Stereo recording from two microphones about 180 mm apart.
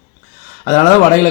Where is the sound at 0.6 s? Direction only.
40° left (ahead or behind).